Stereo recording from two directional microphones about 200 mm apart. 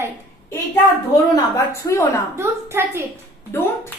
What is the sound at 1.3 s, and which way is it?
Speech, 15° left (ahead or behind).